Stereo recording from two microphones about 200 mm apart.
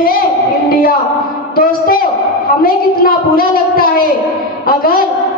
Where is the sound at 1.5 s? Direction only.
45° left (ahead or behind).